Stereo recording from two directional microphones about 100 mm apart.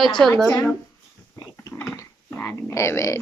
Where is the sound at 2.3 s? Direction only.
25° left (ahead or behind).